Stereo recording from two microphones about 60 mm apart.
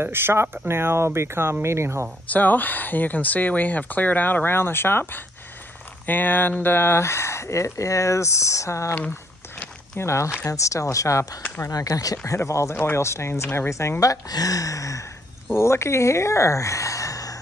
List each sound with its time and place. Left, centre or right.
0.0 s speech: right
2.2 s speech: left
9.9 s speech: left
11.7 s speech: left
12.4 s speech: left
12.7 s speech: left
13.0 s speech: left
14.3 s speech: left
15.5 s speech: left